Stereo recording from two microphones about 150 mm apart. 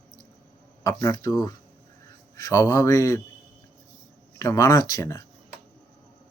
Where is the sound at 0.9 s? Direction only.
25° left (ahead or behind).